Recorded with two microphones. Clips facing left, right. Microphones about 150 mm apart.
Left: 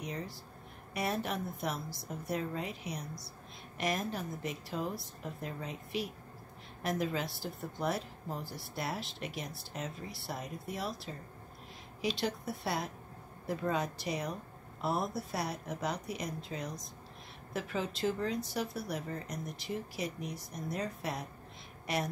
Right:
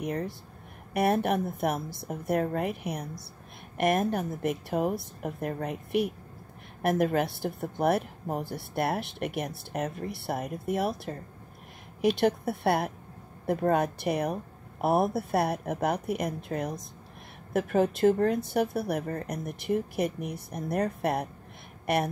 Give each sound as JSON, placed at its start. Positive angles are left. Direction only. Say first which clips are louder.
{"t": 0.0, "sound": "a woman's voice", "louder": "right 9 dB", "side_deg": -55}